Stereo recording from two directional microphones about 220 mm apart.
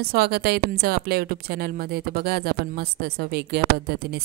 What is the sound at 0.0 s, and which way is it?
Speech, 45° right (ahead or behind).